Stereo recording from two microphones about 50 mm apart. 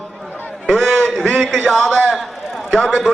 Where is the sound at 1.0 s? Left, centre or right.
Centre.